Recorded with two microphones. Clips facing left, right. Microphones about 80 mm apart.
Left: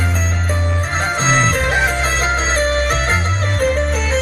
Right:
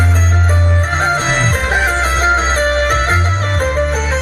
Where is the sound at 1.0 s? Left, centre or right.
Right.